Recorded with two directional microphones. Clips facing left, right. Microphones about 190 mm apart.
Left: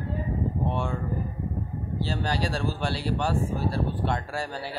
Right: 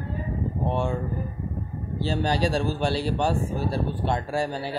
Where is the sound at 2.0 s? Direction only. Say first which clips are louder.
Right 6 dB; 20° right (ahead or behind).